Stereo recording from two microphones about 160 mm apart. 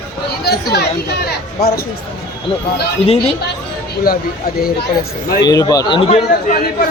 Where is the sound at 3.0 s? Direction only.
40° left (ahead or behind).